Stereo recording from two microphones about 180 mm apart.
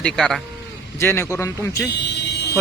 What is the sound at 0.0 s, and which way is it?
Speech, centre (ahead or behind).